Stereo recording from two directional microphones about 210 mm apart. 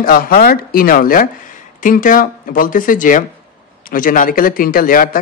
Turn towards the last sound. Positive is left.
turn(degrees=40)  # may be behind; listen again after turning